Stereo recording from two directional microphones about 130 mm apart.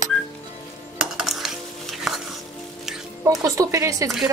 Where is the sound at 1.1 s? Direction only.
5° right (ahead or behind).